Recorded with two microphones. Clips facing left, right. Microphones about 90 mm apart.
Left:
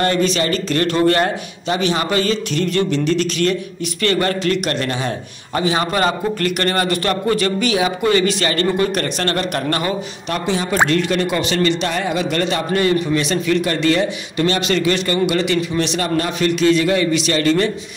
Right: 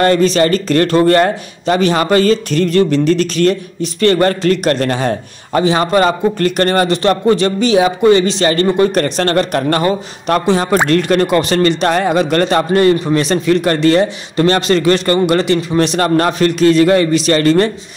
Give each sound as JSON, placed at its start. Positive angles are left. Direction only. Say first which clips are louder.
{"t": 0.0, "sound": "a man's voice", "louder": "right 6 dB", "side_deg": -40}